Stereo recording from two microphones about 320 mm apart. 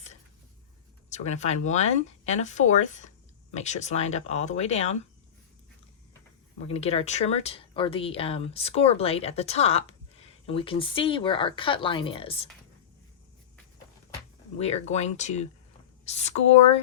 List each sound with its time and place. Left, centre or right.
1.1 s speech: left
6.7 s speech: centre
14.6 s speech: centre